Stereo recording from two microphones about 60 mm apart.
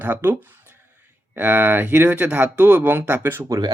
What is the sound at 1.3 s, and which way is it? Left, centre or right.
Speech, right.